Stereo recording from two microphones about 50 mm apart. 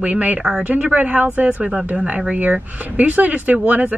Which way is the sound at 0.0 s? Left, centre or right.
Right.